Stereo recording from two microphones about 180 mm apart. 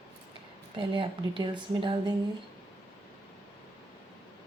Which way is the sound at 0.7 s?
30° right (ahead or behind).